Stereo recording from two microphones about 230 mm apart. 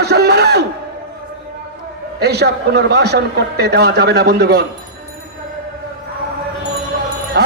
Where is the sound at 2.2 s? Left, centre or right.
Right.